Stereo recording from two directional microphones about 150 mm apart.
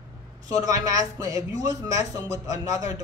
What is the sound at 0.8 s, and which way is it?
Speech, 20° right (ahead or behind).